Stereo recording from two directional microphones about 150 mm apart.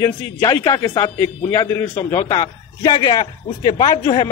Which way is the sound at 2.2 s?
25° left (ahead or behind).